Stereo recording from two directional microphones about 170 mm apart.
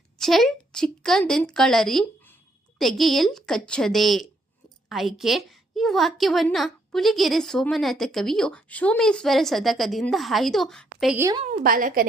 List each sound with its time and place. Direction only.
0.2 s a woman's voice: centre (ahead or behind)
11.6 s a woman's voice: 55° right (ahead or behind)